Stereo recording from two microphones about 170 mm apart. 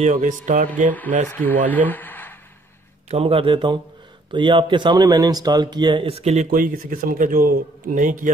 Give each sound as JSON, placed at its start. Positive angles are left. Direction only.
{"t": 0.0, "sound": "speech", "side_deg": -45}
{"t": 1.3, "sound": "speech", "side_deg": 10}
{"t": 3.1, "sound": "speech", "side_deg": -35}